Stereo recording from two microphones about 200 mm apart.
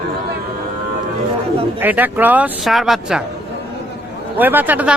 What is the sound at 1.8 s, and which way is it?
Speech, 10° right (ahead or behind).